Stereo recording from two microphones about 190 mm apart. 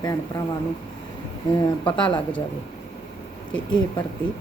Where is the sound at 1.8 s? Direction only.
25° left (ahead or behind).